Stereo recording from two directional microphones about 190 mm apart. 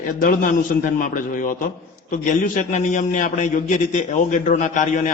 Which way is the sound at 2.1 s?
40° left (ahead or behind).